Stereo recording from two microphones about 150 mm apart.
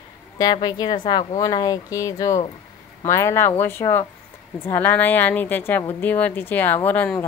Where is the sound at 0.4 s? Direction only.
30° left (ahead or behind).